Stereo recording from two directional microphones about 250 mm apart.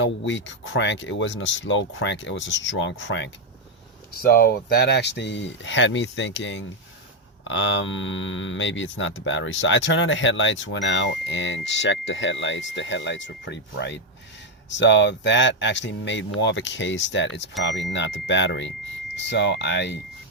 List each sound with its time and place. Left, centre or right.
0.0 s speech: left